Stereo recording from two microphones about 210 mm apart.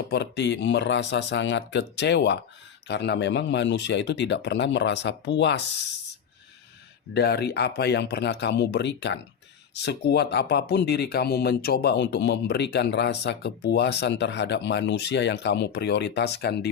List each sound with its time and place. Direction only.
0.1 s speech: 55° left (ahead or behind)
7.1 s speech: 50° left (ahead or behind)